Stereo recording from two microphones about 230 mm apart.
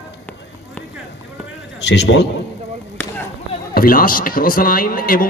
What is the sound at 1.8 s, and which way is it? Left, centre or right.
Speech, left.